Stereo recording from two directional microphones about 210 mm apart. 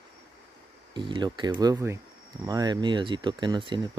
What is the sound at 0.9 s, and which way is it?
Speech, 20° right (ahead or behind).